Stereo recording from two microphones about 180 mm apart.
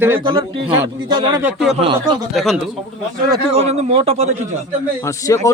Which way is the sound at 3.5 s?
35° right (ahead or behind).